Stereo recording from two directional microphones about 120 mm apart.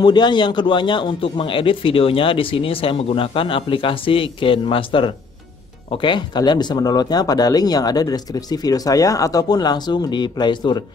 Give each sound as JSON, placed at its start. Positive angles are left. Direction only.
{"t": 0.0, "sound": "a man's voice", "side_deg": 40}